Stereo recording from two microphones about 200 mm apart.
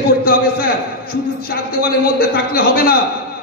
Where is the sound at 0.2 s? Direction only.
50° left (ahead or behind).